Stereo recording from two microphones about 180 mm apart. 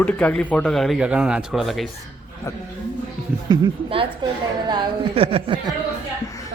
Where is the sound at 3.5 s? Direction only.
25° right (ahead or behind).